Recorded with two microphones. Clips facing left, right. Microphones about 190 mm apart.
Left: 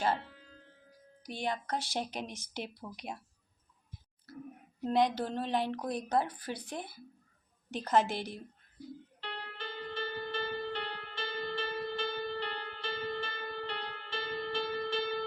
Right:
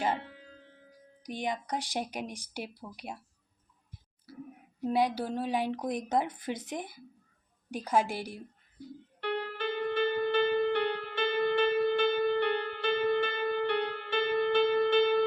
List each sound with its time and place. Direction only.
0.2 s music: 60° right (ahead or behind)
1.2 s speech: 15° right (ahead or behind)
4.3 s speech: 10° right (ahead or behind)
9.2 s music: 60° right (ahead or behind)